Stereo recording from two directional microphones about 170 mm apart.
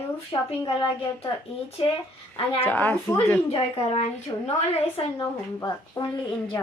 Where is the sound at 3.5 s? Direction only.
35° left (ahead or behind).